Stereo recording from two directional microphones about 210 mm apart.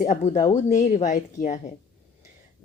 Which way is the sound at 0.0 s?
30° left (ahead or behind).